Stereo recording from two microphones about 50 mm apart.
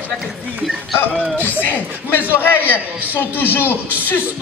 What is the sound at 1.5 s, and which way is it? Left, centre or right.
Speech, left.